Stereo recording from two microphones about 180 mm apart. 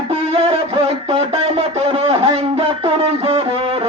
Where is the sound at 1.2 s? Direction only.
35° right (ahead or behind).